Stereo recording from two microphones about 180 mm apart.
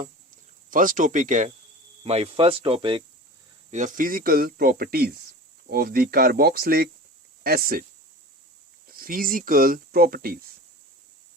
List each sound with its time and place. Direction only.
0.7 s speech: 50° right (ahead or behind); by 3.0 s 30° right (ahead or behind)
3.7 s speech: 45° right (ahead or behind)
8.9 s speech: 55° right (ahead or behind)